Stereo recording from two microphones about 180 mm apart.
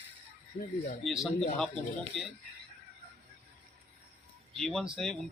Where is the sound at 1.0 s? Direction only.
Centre (ahead or behind).